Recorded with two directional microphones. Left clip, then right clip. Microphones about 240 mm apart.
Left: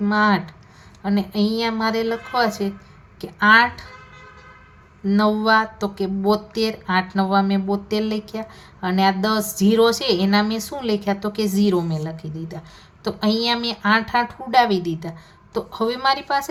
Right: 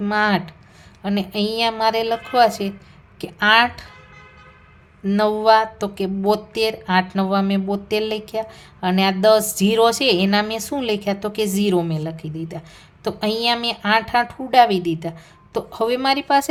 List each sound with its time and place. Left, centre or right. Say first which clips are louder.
0.0 s a woman's voice: even; right
5.0 s speech: right 3 dB; right